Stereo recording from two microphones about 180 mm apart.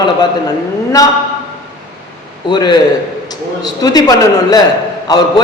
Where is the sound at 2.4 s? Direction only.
25° left (ahead or behind).